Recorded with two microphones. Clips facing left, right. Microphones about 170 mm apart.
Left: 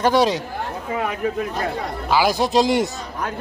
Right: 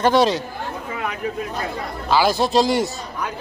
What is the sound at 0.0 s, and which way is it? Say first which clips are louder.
Speech: right 1 dB; 10° left (ahead or behind).